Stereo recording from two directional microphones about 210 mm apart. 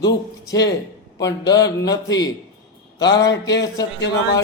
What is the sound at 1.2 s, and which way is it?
Speech, 20° left (ahead or behind).